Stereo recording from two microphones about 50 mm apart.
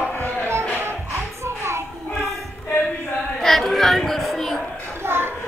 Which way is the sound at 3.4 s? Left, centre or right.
Centre.